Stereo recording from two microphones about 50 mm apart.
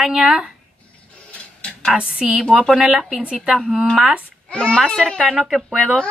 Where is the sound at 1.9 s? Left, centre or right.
Centre.